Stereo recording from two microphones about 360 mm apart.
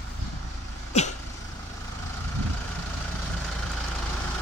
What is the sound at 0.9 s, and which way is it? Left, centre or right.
Vehicle, centre.